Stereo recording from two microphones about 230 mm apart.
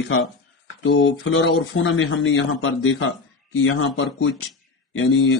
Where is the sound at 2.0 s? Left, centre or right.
Left.